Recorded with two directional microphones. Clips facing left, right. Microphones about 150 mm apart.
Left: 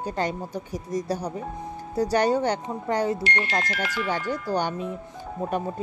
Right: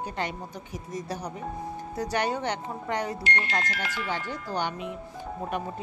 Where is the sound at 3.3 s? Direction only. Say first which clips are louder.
Left 3 dB; 10° left (ahead or behind).